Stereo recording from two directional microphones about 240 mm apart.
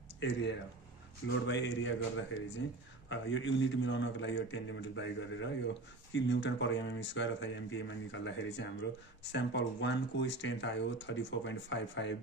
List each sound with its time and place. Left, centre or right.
0.2 s speech: left